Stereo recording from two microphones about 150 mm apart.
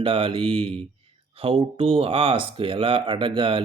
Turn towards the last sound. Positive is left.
turn(degrees=-35)  # may be behind; listen again after turning